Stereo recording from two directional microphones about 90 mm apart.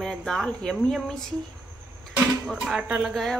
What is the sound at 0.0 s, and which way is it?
Speech, 5° left (ahead or behind).